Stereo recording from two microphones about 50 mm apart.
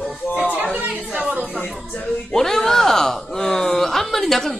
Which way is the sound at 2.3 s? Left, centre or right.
Centre.